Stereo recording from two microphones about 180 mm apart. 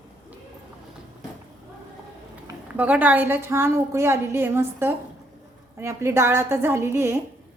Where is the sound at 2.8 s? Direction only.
10° right (ahead or behind).